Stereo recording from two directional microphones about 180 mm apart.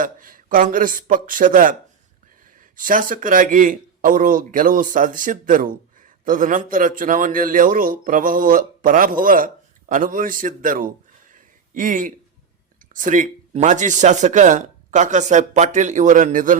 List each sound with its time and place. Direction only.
0.0 s speech: 50° right (ahead or behind)
2.7 s speech: 50° right (ahead or behind)